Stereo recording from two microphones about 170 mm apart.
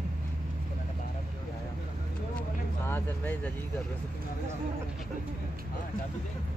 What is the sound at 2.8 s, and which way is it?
Speech, 10° left (ahead or behind).